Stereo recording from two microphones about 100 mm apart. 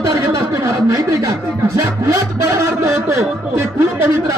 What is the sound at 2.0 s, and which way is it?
Speech, 30° right (ahead or behind).